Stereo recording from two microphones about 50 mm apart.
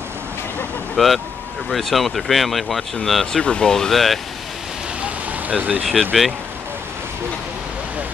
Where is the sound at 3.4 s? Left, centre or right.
Centre.